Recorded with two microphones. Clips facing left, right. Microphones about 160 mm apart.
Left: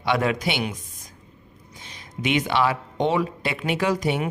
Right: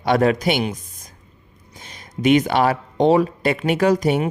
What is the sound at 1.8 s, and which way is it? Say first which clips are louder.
Speech: right 8 dB; 45° right (ahead or behind).